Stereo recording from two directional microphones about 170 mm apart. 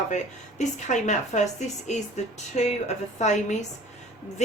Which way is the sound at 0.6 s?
45° left (ahead or behind).